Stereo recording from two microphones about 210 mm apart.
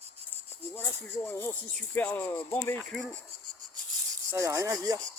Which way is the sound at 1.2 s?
10° left (ahead or behind).